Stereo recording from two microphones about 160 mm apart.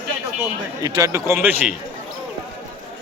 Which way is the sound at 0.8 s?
20° right (ahead or behind).